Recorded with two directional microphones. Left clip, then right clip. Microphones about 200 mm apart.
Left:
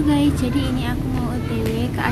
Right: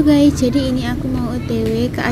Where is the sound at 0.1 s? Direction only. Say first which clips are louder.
Right 6 dB; 30° right (ahead or behind).